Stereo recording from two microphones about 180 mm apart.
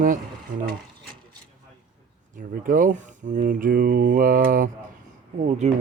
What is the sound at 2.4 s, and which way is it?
Speech, 50° right (ahead or behind).